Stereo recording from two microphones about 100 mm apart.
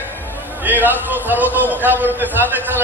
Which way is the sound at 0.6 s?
20° right (ahead or behind).